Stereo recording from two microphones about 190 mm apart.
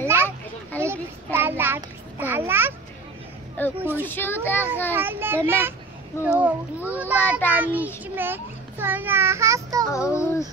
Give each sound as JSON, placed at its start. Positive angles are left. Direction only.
{"t": 0.0, "sound": "children playing", "side_deg": -15}
{"t": 0.7, "sound": "child singing", "side_deg": -10}
{"t": 3.6, "sound": "a sound", "side_deg": 10}
{"t": 4.0, "sound": "a child's voice", "side_deg": 10}
{"t": 4.9, "sound": "a child's voice", "side_deg": -10}
{"t": 7.2, "sound": "a child's voice", "side_deg": 10}
{"t": 7.5, "sound": "a child's voice", "side_deg": -10}
{"t": 9.9, "sound": "a child's voice", "side_deg": 15}